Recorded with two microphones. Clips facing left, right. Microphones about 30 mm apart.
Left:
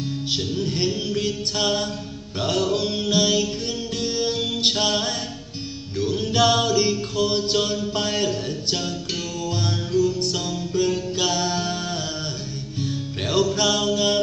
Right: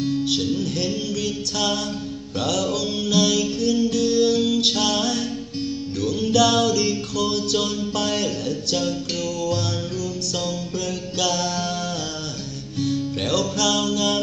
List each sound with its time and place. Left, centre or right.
0.4 s music: left
7.9 s mantra: left
9.9 s music: left
13.3 s music: left
13.7 s mantra: left